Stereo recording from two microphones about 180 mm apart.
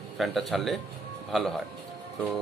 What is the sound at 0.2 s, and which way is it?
Speech, centre (ahead or behind).